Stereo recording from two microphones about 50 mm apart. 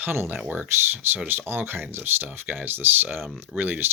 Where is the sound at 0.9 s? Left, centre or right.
Right.